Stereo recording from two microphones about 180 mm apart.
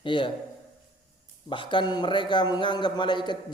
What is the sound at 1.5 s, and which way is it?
A man's voice, 25° left (ahead or behind).